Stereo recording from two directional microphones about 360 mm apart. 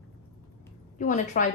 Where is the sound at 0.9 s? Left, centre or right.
Centre.